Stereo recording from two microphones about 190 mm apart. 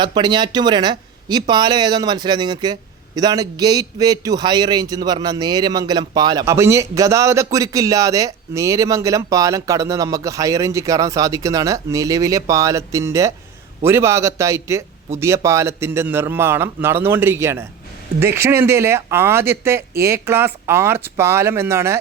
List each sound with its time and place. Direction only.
0.0 s a man's voice: 25° right (ahead or behind)